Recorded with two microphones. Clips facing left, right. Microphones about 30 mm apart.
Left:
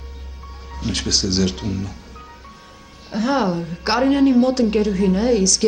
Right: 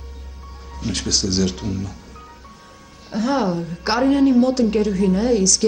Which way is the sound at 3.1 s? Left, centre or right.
Centre.